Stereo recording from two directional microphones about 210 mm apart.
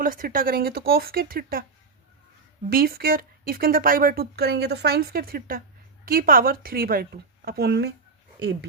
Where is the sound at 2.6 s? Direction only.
45° right (ahead or behind).